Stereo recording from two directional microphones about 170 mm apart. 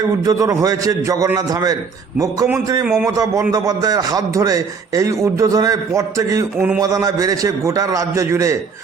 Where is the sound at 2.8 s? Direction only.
5° right (ahead or behind).